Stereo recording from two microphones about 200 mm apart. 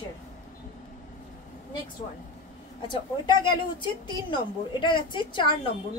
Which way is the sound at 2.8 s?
25° left (ahead or behind).